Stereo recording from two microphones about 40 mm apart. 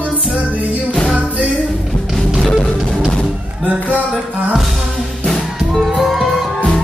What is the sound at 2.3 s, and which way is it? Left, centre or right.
Music, centre.